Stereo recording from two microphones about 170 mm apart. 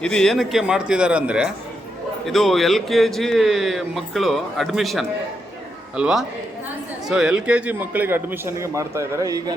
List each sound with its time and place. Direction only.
0.0 s a man's voice: 5° left (ahead or behind); by 9.6 s 20° right (ahead or behind)